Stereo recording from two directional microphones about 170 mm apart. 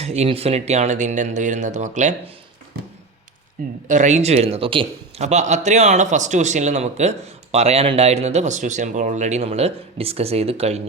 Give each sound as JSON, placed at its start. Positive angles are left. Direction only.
{"t": 0.0, "sound": "speech", "side_deg": -40}
{"t": 3.8, "sound": "a man's voice", "side_deg": -45}